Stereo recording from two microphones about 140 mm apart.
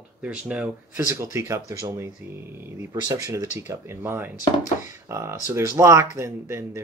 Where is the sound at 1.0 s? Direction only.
20° right (ahead or behind).